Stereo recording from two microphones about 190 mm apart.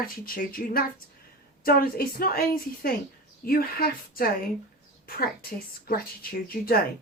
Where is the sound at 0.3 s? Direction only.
50° left (ahead or behind).